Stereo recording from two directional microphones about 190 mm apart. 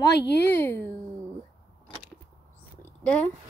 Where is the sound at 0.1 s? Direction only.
60° left (ahead or behind).